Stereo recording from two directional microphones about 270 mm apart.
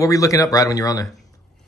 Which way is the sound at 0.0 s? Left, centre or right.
Centre.